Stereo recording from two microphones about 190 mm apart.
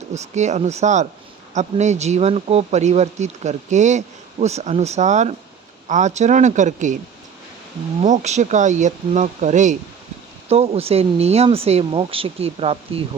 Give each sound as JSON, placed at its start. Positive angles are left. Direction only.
{"t": 0.1, "sound": "speech", "side_deg": -35}
{"t": 8.0, "sound": "speech", "side_deg": -40}